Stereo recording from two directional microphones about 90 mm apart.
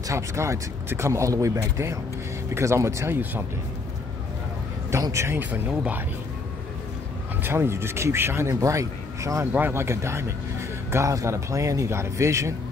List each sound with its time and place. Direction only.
0.1 s speech: 35° right (ahead or behind)
5.1 s speech: 30° right (ahead or behind)
5.5 s speech: 15° right (ahead or behind)
7.4 s speech: 30° right (ahead or behind)
9.5 s speech: 25° right (ahead or behind)